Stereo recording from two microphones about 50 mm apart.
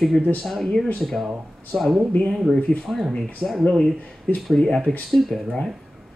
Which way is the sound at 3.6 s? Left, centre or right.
Centre.